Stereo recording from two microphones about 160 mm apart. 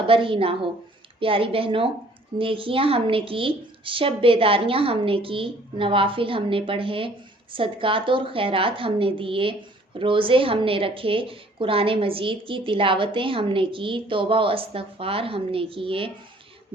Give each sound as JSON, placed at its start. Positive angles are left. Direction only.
{"t": 0.1, "sound": "a woman's voice", "side_deg": -35}